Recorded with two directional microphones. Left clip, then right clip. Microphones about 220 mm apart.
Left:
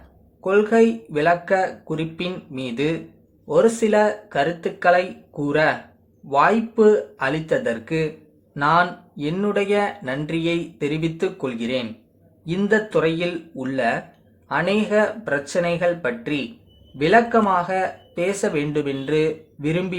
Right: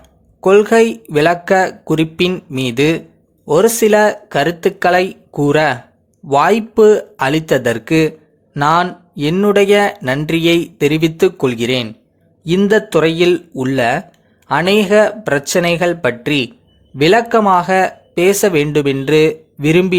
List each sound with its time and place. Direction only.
0.4 s speech: 45° right (ahead or behind)